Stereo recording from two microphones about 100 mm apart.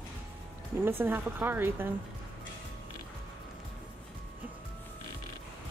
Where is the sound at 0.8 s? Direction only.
20° right (ahead or behind).